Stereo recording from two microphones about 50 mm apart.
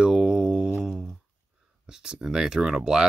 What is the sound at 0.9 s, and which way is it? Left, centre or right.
Speech, centre.